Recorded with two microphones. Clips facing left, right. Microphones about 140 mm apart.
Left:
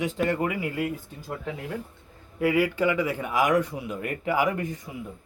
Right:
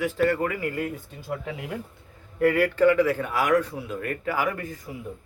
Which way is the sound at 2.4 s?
10° left (ahead or behind).